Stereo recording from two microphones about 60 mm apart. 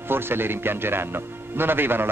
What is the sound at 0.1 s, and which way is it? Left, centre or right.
Speech, right.